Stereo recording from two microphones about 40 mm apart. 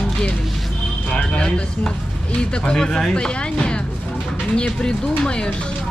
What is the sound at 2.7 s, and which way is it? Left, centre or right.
Speech, centre.